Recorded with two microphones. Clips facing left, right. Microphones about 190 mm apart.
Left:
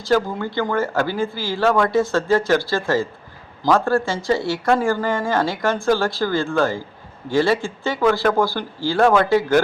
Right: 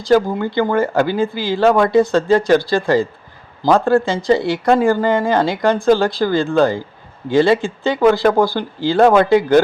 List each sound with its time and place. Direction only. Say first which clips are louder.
0.0 s speech: right 5 dB; 15° right (ahead or behind)